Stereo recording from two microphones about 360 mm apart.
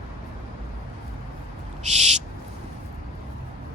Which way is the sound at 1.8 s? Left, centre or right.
Centre.